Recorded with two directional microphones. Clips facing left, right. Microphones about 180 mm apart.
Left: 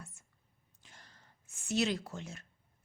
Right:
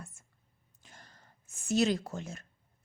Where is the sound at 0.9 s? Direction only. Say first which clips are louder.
Right 4 dB; 45° right (ahead or behind).